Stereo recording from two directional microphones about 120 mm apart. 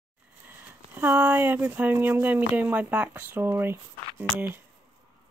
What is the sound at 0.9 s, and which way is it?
Speech, 15° right (ahead or behind).